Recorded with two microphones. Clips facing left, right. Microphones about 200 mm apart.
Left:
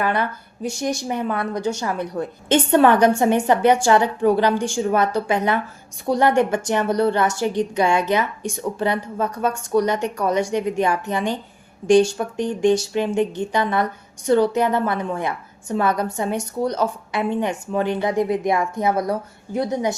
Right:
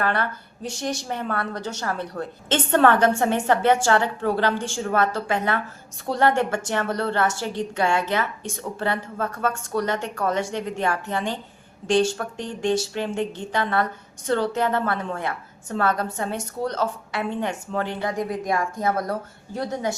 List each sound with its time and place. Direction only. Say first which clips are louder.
0.0 s a woman's voice: left 3 dB; 15° left (ahead or behind)